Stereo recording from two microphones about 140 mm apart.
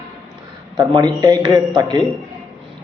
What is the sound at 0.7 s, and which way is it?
A man's voice, 30° right (ahead or behind).